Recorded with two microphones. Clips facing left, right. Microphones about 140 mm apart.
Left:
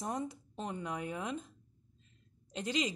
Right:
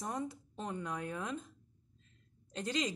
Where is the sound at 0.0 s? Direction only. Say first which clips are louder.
Left 1 dB; 20° left (ahead or behind).